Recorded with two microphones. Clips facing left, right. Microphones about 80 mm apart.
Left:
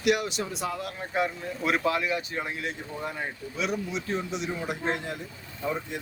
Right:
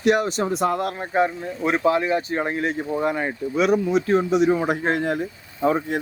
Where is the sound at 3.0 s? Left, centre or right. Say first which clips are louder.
Right 9 dB; right.